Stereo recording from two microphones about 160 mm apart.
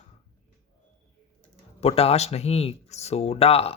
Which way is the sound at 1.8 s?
40° left (ahead or behind).